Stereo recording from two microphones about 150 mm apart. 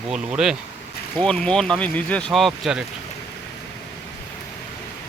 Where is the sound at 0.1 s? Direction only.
5° right (ahead or behind).